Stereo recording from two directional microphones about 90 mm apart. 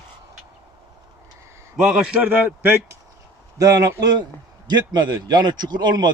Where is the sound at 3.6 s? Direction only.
45° right (ahead or behind).